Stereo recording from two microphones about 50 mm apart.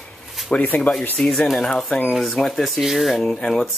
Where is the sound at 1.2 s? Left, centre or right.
Centre.